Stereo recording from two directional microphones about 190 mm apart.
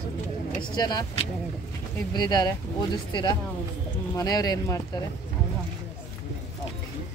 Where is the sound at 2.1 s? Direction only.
20° left (ahead or behind).